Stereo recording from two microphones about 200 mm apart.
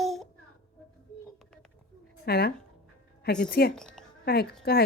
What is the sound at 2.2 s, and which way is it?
Speech, 50° left (ahead or behind).